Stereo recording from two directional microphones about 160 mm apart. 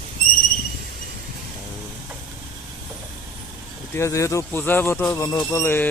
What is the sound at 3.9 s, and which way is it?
Speech, 20° left (ahead or behind).